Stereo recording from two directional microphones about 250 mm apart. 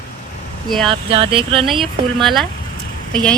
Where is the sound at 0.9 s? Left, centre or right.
Right.